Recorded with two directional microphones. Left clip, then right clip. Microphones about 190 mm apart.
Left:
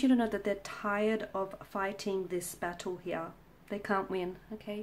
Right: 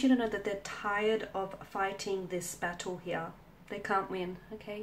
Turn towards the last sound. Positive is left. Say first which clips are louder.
# left 1 dB
turn(degrees=45)  # may be behind; listen again after turning